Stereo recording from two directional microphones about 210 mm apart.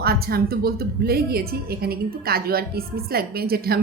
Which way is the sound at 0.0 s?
45° right (ahead or behind).